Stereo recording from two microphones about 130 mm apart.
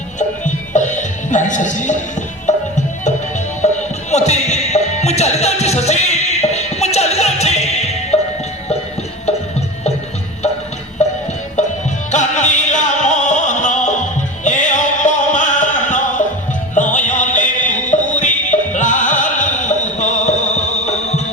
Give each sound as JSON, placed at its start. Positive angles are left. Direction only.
{"t": 0.2, "sound": "music", "side_deg": 70}
{"t": 3.6, "sound": "music", "side_deg": 60}
{"t": 9.2, "sound": "music", "side_deg": 55}
{"t": 11.0, "sound": "music", "side_deg": 60}